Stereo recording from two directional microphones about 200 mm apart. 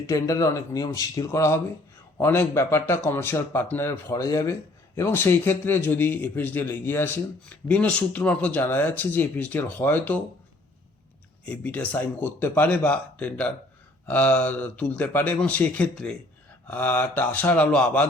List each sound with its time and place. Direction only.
0.0 s a man's voice: 15° left (ahead or behind)
11.4 s a man's voice: 5° left (ahead or behind)